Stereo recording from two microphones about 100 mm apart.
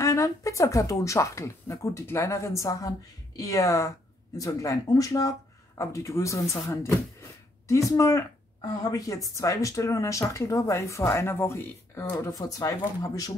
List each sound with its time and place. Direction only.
0.0 s speech: 30° left (ahead or behind)